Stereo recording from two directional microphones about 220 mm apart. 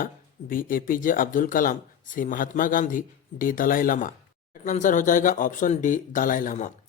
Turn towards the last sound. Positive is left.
turn(degrees=35)  # may be behind; listen again after turning